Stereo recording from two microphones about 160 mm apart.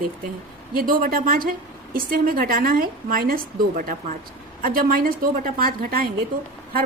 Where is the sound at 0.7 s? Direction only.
65° right (ahead or behind).